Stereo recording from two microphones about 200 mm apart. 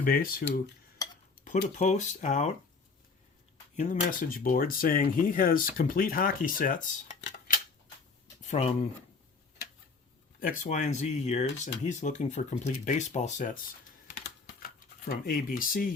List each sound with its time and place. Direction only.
0.0 s speech: 45° left (ahead or behind)
1.0 s dishes: 20° left (ahead or behind)
1.5 s speech: 40° left (ahead or behind)
3.8 s speech: 40° left (ahead or behind)
8.4 s a sound: 35° left (ahead or behind)
10.4 s speech: 40° left (ahead or behind)
15.0 s speech: 45° left (ahead or behind)